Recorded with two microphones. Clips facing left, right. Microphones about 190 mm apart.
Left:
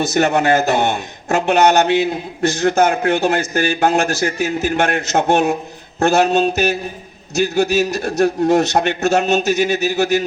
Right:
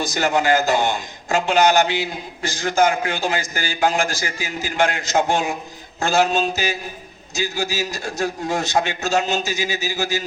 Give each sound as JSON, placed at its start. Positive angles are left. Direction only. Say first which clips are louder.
{"t": 0.0, "sound": "a man's voice", "louder": "left 5 dB", "side_deg": 65}